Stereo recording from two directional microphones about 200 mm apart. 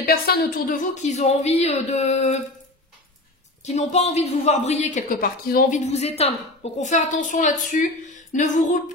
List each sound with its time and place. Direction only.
0.0 s a woman's voice: 50° left (ahead or behind)
3.6 s a woman's voice: 35° left (ahead or behind)